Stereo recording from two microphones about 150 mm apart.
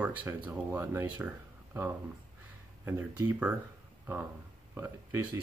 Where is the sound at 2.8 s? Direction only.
15° right (ahead or behind).